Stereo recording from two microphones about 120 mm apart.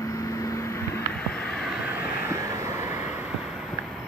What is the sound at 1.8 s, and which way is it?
Vehicle, 15° right (ahead or behind).